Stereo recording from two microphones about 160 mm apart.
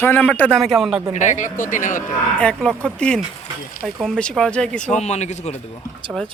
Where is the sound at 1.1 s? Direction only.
50° left (ahead or behind).